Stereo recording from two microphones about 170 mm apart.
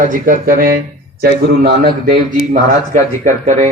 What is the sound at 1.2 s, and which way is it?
Speech, 70° right (ahead or behind).